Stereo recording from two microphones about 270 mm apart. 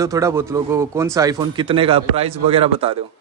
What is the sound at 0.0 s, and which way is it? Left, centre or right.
A man's voice, centre.